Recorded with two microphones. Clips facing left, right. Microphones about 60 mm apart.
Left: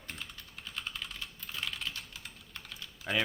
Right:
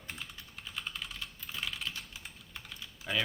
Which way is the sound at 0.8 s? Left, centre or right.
Centre.